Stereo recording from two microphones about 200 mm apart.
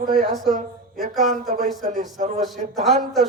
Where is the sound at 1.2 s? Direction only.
40° right (ahead or behind).